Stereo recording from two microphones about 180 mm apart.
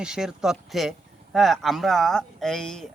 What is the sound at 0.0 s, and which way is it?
Speech, 5° right (ahead or behind).